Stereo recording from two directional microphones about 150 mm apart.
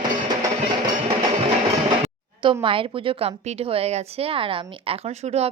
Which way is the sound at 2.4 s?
35° right (ahead or behind).